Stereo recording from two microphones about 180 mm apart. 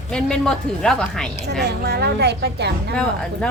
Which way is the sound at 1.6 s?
65° right (ahead or behind).